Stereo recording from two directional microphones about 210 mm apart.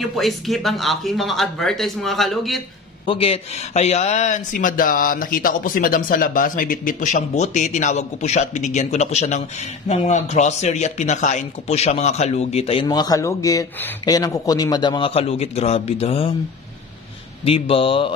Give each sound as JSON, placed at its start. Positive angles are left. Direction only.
{"t": 0.0, "sound": "speech", "side_deg": 0}
{"t": 3.1, "sound": "speech", "side_deg": 25}
{"t": 17.5, "sound": "speech", "side_deg": 25}